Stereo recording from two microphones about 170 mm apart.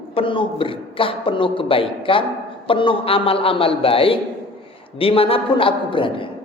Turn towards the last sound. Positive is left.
turn(degrees=30)  # may be behind; listen again after turning